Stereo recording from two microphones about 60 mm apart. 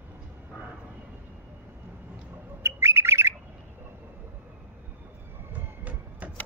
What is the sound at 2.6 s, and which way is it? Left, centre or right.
Bird, right.